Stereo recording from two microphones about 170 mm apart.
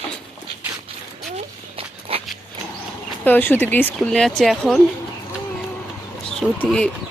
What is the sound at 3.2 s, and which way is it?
Speech, 10° left (ahead or behind).